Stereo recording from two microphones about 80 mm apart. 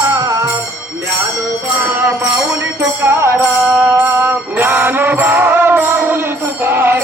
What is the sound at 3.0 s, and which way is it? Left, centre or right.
Music, right.